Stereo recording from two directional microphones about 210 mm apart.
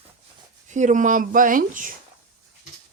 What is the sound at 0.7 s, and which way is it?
Speech, 35° right (ahead or behind).